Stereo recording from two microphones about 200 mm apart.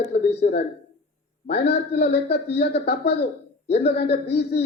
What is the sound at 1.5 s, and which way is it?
Speech, 55° left (ahead or behind).